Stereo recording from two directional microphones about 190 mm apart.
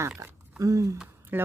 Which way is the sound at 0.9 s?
10° right (ahead or behind).